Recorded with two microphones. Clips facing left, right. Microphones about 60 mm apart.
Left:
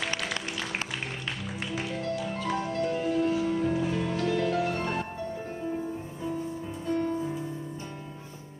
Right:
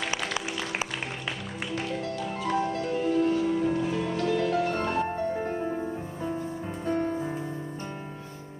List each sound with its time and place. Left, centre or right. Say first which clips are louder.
0.0 s music: right 1 dB; centre
5.1 s music: right 6 dB; right